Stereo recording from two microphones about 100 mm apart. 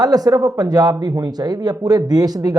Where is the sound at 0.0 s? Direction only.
40° right (ahead or behind).